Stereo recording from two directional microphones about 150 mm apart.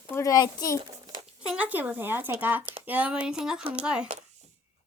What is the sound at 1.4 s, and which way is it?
Speech, 10° right (ahead or behind).